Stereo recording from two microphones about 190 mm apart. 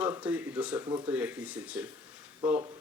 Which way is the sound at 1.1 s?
10° right (ahead or behind).